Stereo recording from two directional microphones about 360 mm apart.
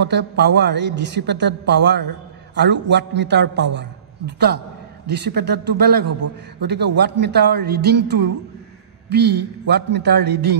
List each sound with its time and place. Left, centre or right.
0.0 s a man's voice: right